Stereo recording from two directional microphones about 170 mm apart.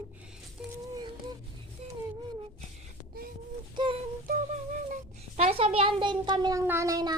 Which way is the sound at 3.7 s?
30° right (ahead or behind).